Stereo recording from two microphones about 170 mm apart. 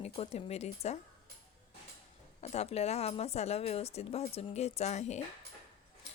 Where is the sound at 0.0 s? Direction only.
40° left (ahead or behind).